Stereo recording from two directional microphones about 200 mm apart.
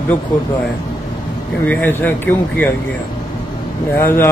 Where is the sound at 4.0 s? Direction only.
10° left (ahead or behind).